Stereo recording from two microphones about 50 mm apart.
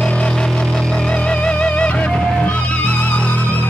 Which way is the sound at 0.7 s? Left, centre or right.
Centre.